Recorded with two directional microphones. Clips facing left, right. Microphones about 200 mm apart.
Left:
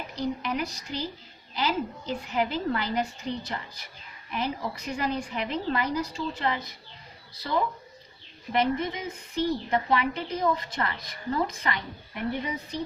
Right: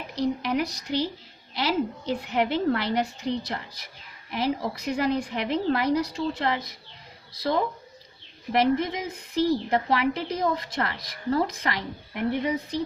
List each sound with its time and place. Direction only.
0.2 s a woman's voice: 80° right
8.5 s a woman's voice: 80° right